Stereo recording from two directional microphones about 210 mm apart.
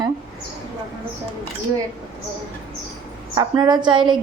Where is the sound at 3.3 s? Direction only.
20° right (ahead or behind).